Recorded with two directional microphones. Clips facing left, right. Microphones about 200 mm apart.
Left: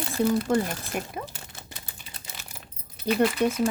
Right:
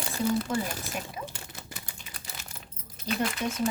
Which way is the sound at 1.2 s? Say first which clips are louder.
Left 3 dB; 55° left (ahead or behind).